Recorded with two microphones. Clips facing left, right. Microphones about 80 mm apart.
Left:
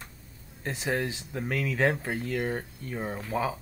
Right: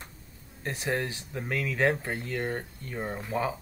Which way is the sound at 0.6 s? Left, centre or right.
Centre.